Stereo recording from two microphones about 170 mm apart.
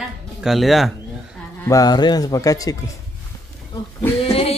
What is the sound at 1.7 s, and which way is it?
Speech, 25° left (ahead or behind).